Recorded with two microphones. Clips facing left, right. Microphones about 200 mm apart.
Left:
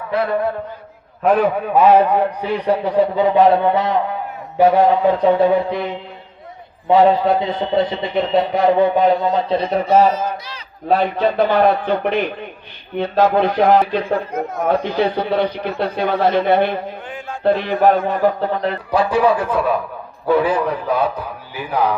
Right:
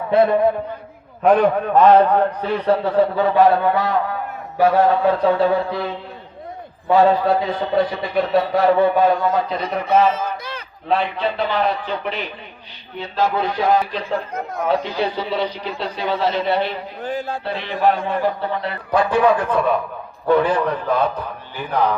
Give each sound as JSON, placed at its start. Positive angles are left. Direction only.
{"t": 0.1, "sound": "a man's voice", "side_deg": -25}
{"t": 1.2, "sound": "a man's voice", "side_deg": 5}
{"t": 17.0, "sound": "speech", "side_deg": -35}
{"t": 17.4, "sound": "a man's voice", "side_deg": 50}
{"t": 18.9, "sound": "a man's voice", "side_deg": 0}